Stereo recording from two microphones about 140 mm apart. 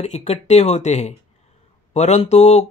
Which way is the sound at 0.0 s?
50° left (ahead or behind).